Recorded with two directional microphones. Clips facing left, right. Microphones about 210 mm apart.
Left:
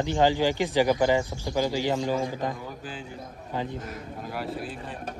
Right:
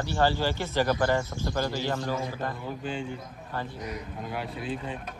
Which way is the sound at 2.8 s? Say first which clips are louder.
Right 4 dB; centre (ahead or behind).